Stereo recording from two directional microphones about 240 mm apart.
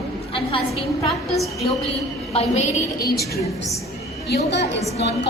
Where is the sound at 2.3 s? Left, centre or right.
Left.